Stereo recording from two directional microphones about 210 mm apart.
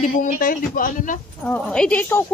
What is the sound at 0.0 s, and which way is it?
Speech, 35° left (ahead or behind).